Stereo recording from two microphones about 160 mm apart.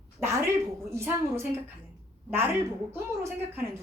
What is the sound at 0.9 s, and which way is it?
A woman's voice, 15° right (ahead or behind).